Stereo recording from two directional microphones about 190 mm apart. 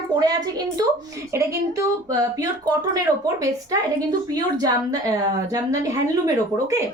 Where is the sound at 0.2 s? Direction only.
20° right (ahead or behind).